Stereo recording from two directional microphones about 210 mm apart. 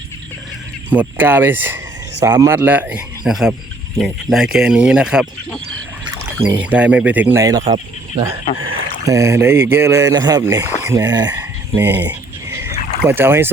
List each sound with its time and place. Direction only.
0.9 s speech: 10° right (ahead or behind)
6.6 s speech: 5° right (ahead or behind)
11.3 s frog: 10° right (ahead or behind)
13.1 s speech: 10° right (ahead or behind)